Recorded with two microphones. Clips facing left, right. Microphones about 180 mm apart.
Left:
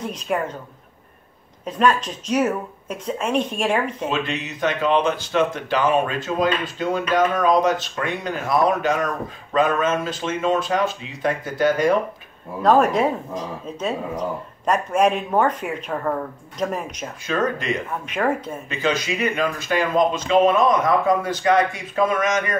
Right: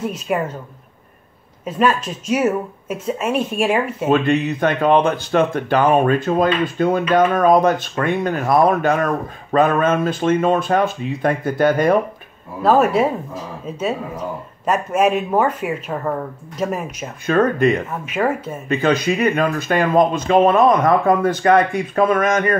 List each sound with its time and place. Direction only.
0.0 s speech: 5° right (ahead or behind)
1.6 s speech: 5° right (ahead or behind)
4.1 s speech: 50° right (ahead or behind)
12.6 s speech: 5° right (ahead or behind)
17.3 s speech: 55° right (ahead or behind)
18.0 s speech: 5° right (ahead or behind)
18.7 s speech: 55° right (ahead or behind)